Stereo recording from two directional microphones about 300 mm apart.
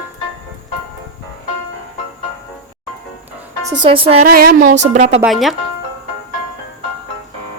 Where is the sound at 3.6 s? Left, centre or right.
Centre.